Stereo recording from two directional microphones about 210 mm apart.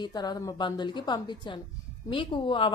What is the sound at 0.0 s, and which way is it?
A woman's voice, 20° left (ahead or behind).